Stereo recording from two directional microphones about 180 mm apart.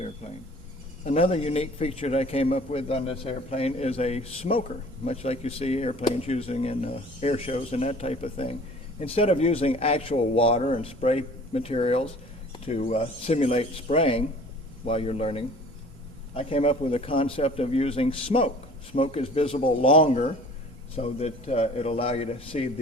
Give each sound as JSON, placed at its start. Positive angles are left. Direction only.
{"t": 1.0, "sound": "a man's voice", "side_deg": 35}